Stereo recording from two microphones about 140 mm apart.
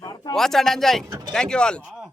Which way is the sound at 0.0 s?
30° left (ahead or behind).